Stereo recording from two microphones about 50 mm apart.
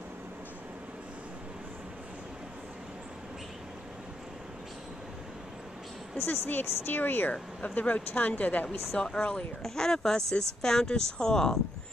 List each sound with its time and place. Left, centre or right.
6.2 s a woman's voice: left
6.5 s speech: left
7.6 s speech: left
8.9 s speech: centre
9.6 s speech: centre